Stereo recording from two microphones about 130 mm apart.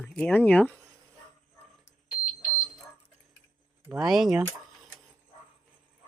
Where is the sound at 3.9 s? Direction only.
Centre (ahead or behind).